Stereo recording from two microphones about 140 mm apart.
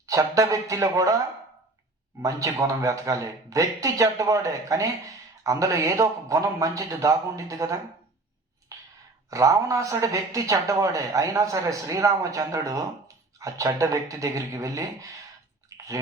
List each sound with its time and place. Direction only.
0.0 s a man's voice: 25° right (ahead or behind)
2.2 s a man's voice: 25° right (ahead or behind)
8.7 s a sound: 25° right (ahead or behind)
9.3 s a man's voice: 25° right (ahead or behind)
15.7 s chewing: 25° right (ahead or behind)